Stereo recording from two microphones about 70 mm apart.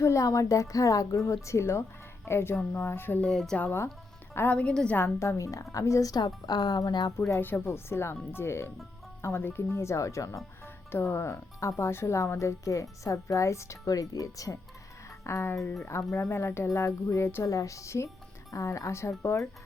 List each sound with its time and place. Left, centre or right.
0.0 s speech: left
3.2 s a woman's voice: centre
3.6 s speech: left
4.5 s a woman's voice: centre
5.2 s speech: left
6.1 s speech: left
7.2 s speech: left
10.9 s speech: left
15.2 s speech: left
17.5 s speech: left